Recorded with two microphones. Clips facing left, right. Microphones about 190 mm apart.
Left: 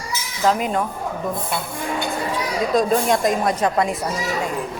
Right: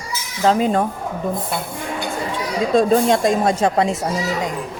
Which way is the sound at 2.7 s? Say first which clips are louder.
Right 4 dB; 30° right (ahead or behind).